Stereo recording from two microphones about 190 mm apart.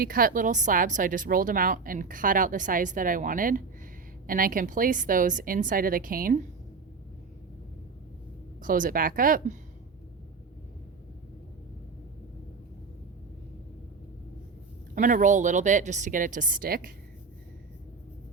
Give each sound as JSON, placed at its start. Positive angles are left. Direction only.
{"t": 0.0, "sound": "a woman's voice", "side_deg": -50}
{"t": 8.6, "sound": "a woman's voice", "side_deg": -45}
{"t": 14.9, "sound": "a woman's voice", "side_deg": -45}